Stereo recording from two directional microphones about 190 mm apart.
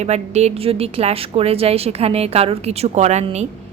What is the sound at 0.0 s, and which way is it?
A woman's voice, 35° right (ahead or behind).